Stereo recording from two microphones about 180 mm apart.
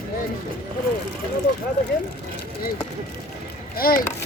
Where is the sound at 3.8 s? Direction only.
55° left (ahead or behind).